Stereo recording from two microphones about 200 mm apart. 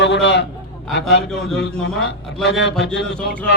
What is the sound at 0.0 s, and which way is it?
Speech, 60° left (ahead or behind).